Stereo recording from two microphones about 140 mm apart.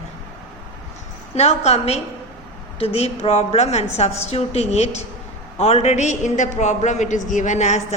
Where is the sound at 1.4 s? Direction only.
50° left (ahead or behind).